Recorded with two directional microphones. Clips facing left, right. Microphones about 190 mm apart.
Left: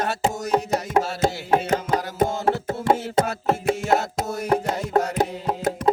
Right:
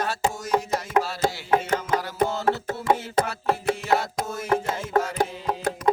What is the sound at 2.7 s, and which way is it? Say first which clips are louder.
Music: left 2 dB; 25° left (ahead or behind).